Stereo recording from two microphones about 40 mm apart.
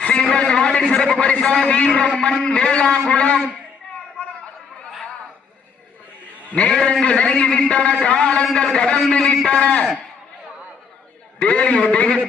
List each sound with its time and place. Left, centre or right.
0.1 s a sound: centre
1.3 s a man's voice: left
6.6 s a man's voice: left
11.3 s a man's voice: left
12.0 s a man's voice: centre